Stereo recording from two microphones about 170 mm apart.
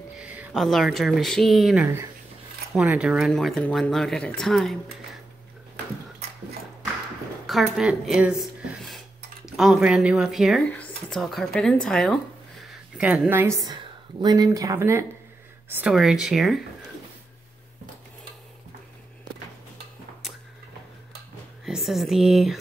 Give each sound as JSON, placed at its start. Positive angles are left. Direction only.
{"t": 0.2, "sound": "speech", "side_deg": -10}
{"t": 7.4, "sound": "speech", "side_deg": 0}
{"t": 15.7, "sound": "speech", "side_deg": -5}
{"t": 21.6, "sound": "speech", "side_deg": 0}